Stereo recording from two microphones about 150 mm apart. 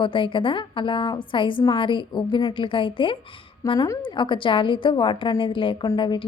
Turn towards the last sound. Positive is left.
turn(degrees=30)  # may be behind; listen again after turning